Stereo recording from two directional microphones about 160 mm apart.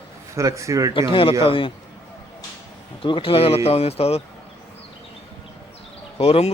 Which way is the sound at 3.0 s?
35° left (ahead or behind).